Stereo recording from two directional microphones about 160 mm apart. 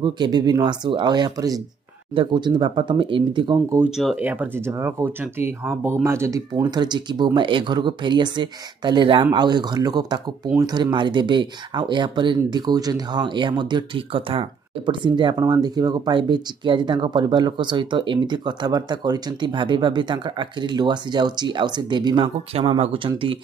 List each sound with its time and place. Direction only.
0.0 s speech: 25° right (ahead or behind)
3.5 s speech: 15° right (ahead or behind)
3.9 s speech: centre (ahead or behind); by 23.4 s 35° right (ahead or behind)